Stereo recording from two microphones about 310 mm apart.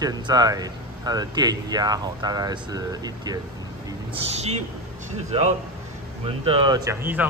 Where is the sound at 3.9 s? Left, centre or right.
Centre.